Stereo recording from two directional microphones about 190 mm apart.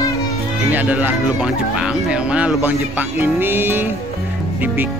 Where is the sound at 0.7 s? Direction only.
10° right (ahead or behind).